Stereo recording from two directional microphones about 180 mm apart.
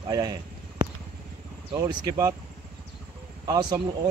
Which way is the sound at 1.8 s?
20° right (ahead or behind).